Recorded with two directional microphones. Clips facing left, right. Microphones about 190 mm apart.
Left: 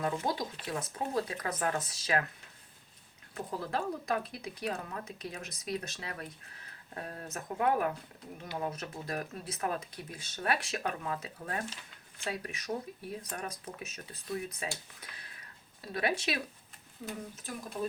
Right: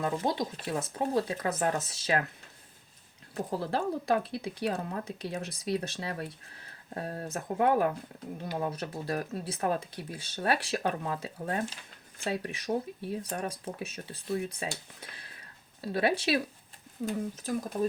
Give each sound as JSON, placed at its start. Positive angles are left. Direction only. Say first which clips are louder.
{"t": 0.0, "sound": "speech", "louder": "right 3 dB", "side_deg": -25}
{"t": 3.3, "sound": "speech", "louder": "right 4 dB", "side_deg": -30}